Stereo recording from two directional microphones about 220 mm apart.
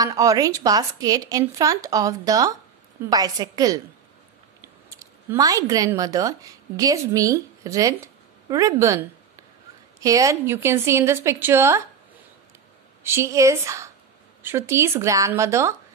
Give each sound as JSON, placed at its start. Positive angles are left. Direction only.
{"t": 0.0, "sound": "a woman's voice", "side_deg": -15}
{"t": 13.0, "sound": "a woman's voice", "side_deg": -10}